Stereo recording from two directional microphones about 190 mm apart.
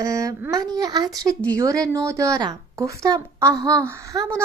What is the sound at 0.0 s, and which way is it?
Speech, 15° right (ahead or behind).